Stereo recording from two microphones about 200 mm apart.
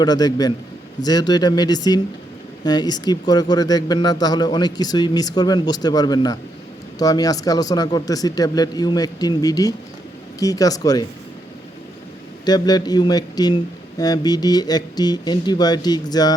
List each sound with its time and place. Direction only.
0.0 s speech: 20° left (ahead or behind)
12.5 s speech: 20° left (ahead or behind)